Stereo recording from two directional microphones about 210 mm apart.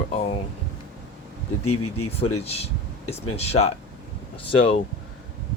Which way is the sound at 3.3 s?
30° left (ahead or behind).